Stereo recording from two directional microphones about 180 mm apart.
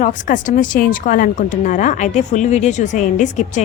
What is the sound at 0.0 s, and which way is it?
A woman's voice, 45° left (ahead or behind).